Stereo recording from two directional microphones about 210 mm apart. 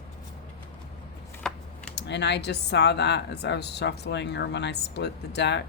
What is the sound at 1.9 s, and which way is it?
Speech, 55° left (ahead or behind).